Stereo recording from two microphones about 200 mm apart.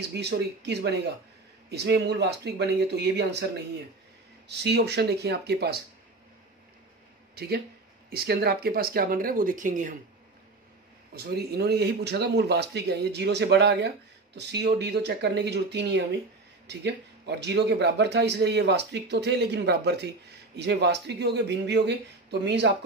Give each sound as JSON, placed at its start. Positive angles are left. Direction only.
{"t": 0.1, "sound": "speech", "side_deg": -55}
{"t": 4.5, "sound": "speech", "side_deg": -55}
{"t": 7.3, "sound": "speech", "side_deg": -50}
{"t": 11.1, "sound": "speech", "side_deg": -55}